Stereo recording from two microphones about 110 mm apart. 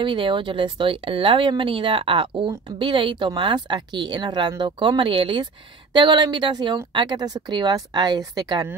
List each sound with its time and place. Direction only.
0.0 s a woman's voice: 50° right (ahead or behind)